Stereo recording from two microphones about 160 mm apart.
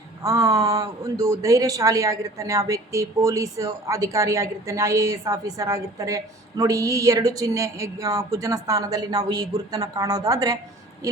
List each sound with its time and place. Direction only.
0.2 s speech: 20° right (ahead or behind)